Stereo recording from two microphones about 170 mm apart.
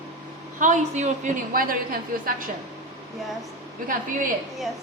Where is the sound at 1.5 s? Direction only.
55° right (ahead or behind).